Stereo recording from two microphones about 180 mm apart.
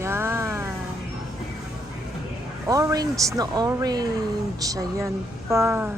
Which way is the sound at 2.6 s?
20° right (ahead or behind).